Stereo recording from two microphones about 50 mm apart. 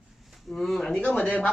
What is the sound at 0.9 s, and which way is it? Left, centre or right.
Speech, left.